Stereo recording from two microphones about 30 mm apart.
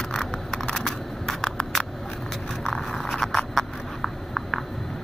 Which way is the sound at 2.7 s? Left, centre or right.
Centre.